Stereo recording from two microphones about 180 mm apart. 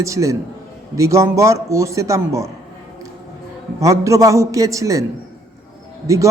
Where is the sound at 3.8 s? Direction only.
15° right (ahead or behind).